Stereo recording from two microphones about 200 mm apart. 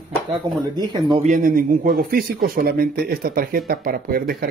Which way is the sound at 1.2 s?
40° right (ahead or behind).